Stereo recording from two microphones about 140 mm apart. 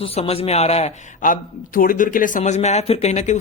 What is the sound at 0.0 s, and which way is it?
Speech, 45° left (ahead or behind).